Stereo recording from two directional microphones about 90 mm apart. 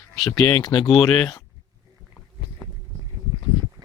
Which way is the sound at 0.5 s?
55° left (ahead or behind).